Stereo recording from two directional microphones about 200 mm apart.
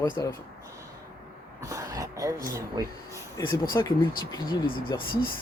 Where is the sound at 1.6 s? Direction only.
15° right (ahead or behind).